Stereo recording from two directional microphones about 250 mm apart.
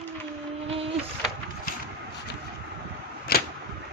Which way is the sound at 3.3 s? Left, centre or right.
Left.